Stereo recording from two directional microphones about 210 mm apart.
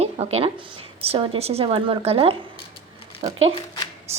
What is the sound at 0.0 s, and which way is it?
A woman's voice, 30° right (ahead or behind).